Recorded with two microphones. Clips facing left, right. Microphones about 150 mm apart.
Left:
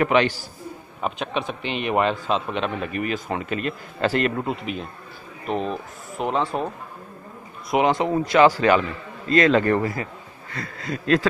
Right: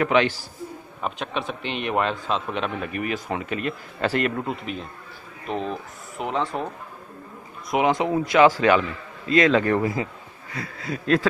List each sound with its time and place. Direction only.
0.0 s a man's voice: centre (ahead or behind)
5.5 s speech: 20° left (ahead or behind)
7.7 s a man's voice: centre (ahead or behind)
9.8 s a man's voice: 15° right (ahead or behind)
10.5 s a man's voice: 5° right (ahead or behind)